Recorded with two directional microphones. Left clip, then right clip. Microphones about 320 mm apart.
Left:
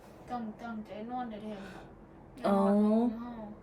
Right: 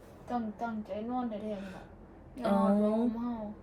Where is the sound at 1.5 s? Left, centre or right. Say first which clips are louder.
Right 1 dB; centre.